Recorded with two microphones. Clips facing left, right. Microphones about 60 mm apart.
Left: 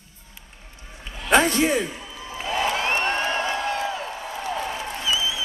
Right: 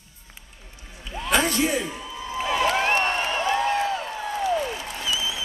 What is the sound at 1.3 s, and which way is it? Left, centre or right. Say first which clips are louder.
Speech: left 4 dB; left.